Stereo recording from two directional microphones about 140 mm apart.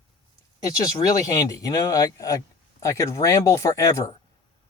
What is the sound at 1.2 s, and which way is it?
Speech, 25° left (ahead or behind).